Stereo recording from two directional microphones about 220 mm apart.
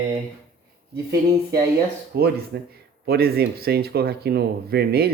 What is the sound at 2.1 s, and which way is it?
Speech, 45° right (ahead or behind).